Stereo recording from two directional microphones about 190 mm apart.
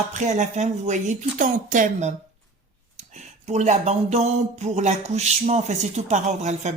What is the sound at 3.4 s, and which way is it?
Speech, 40° right (ahead or behind).